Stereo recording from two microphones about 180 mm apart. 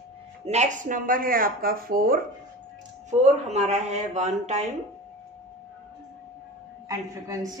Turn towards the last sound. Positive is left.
turn(degrees=-20)  # may be behind; listen again after turning